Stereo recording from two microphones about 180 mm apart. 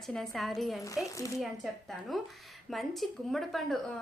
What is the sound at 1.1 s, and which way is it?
Speech, 15° left (ahead or behind).